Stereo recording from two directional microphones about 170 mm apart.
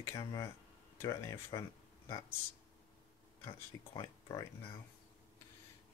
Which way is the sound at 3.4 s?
25° left (ahead or behind).